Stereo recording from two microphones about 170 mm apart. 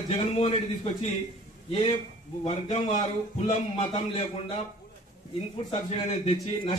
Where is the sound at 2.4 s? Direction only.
40° left (ahead or behind).